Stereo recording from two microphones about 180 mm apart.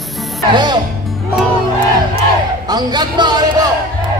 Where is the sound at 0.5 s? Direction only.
25° right (ahead or behind).